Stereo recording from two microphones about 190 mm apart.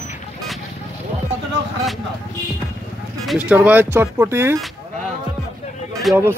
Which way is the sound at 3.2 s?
5° right (ahead or behind).